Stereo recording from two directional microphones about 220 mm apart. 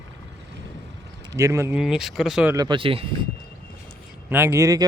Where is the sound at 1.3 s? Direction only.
15° right (ahead or behind).